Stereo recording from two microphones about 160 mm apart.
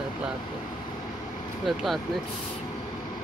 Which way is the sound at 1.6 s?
Centre (ahead or behind).